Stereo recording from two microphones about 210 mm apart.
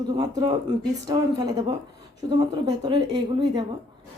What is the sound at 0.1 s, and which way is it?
Speech, 20° right (ahead or behind).